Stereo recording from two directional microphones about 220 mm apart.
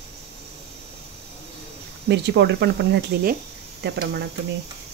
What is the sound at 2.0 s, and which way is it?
Speech, 50° right (ahead or behind).